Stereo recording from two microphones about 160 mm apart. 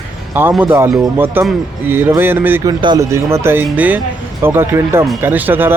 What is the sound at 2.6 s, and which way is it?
Speech, 25° right (ahead or behind).